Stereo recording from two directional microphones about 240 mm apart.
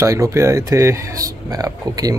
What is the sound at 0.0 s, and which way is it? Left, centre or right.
Speech, centre.